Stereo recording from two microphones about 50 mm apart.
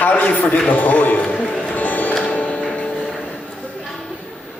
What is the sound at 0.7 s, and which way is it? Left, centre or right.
Speech, left.